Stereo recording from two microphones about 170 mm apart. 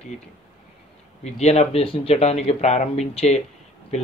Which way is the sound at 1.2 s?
40° left (ahead or behind).